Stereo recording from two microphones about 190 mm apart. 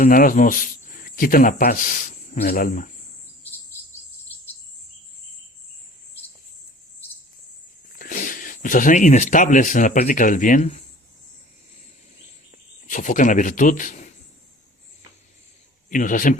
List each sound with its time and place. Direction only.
0.0 s speech: 45° left (ahead or behind)
7.9 s speech: 45° left (ahead or behind)
12.9 s speech: 40° left (ahead or behind)
15.9 s speech: 45° left (ahead or behind)